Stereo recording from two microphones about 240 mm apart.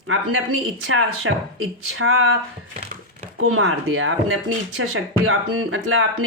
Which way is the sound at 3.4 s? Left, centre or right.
Right.